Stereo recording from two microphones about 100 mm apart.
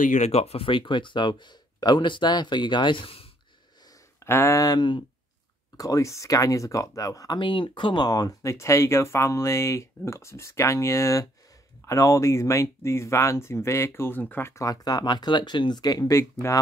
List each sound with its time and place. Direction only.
0.3 s speech: 90° left; by 3.3 s 65° left (ahead or behind)
4.2 s speech: 25° left (ahead or behind)
4.7 s speech: 50° left (ahead or behind)
5.8 s speech: 35° left (ahead or behind)
7.3 s speech: 55° left (ahead or behind); by 16.2 s 40° left (ahead or behind)
16.4 s speech: 25° left (ahead or behind)